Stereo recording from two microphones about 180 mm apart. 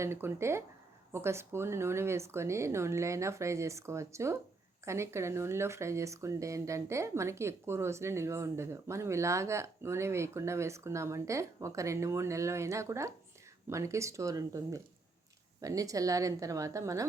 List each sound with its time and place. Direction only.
0.0 s a woman's voice: 15° right (ahead or behind)